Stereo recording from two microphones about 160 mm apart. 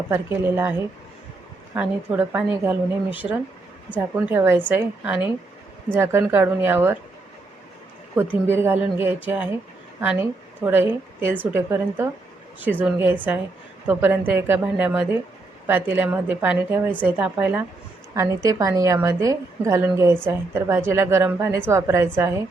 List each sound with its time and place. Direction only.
0.1 s a woman's voice: 15° right (ahead or behind)
1.7 s a woman's voice: 10° right (ahead or behind)
8.1 s a woman's voice: 15° right (ahead or behind)